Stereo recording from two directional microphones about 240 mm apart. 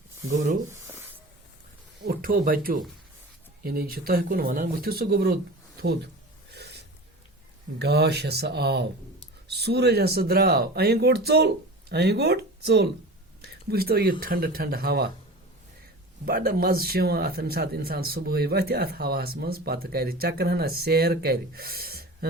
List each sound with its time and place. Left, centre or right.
0.3 s speech: right
0.7 s a sound: centre
2.0 s speech: right
6.5 s a sound: right
7.8 s speech: right
16.2 s speech: right